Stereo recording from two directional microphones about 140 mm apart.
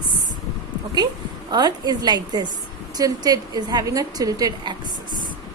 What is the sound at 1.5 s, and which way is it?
A woman's voice, 30° right (ahead or behind).